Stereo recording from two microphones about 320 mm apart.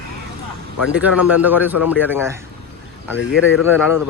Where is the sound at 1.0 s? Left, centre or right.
Centre.